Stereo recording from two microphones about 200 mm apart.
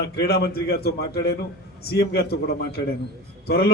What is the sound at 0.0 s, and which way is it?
A man's voice, 55° left (ahead or behind).